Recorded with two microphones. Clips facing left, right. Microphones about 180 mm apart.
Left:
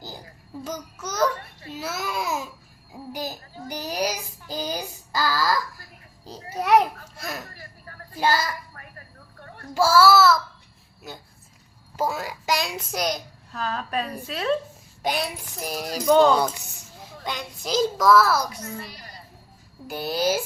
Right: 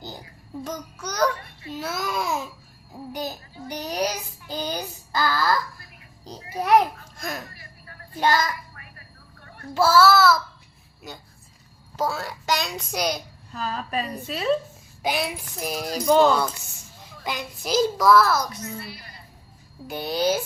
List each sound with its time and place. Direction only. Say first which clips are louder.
0.6 s a woman's voice: even; 5° left (ahead or behind)
2.9 s child singing: right 1 dB; 5° left (ahead or behind)
4.5 s speech: even; 5° left (ahead or behind)
6.7 s a child's voice: even; 5° left (ahead or behind)
9.7 s speech: even; 10° left (ahead or behind)
11.9 s a woman's voice: even; 10° left (ahead or behind); by 16.3 s 10° right (ahead or behind)
16.3 s speech: left 2 dB; 15° left (ahead or behind)
17.2 s a woman's voice: right 1 dB; 5° right (ahead or behind)
18.9 s a sound: right 1 dB; 40° left (ahead or behind)
19.9 s a woman's voice: right 1 dB; 5° left (ahead or behind)